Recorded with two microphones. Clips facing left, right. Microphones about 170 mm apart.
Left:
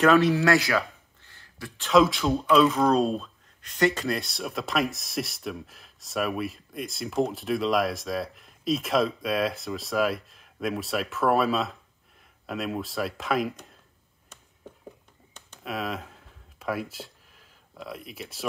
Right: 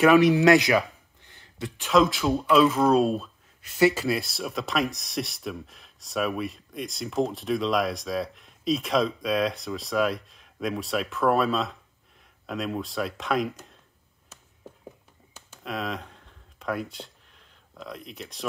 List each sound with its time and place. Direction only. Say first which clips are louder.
0.0 s speech: right 3 dB; 15° right (ahead or behind)
1.9 s speech: left 1 dB; centre (ahead or behind)
15.3 s a sound: even; centre (ahead or behind)